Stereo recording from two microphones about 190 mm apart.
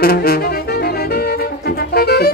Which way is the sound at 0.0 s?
50° left (ahead or behind).